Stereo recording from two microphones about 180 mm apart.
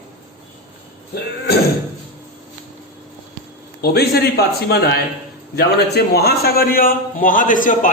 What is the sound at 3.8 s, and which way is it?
A man's voice, 60° left (ahead or behind).